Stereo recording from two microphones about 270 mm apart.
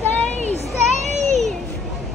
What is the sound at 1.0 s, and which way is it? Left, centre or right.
Children playing, right.